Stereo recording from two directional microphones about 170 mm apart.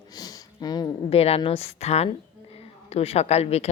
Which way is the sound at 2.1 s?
35° left (ahead or behind).